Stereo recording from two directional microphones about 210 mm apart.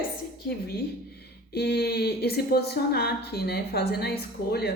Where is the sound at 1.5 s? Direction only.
50° left (ahead or behind).